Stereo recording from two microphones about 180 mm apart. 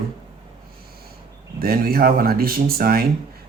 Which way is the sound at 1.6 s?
55° right (ahead or behind).